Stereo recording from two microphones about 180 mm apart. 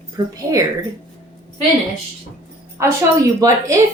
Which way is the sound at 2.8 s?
15° right (ahead or behind).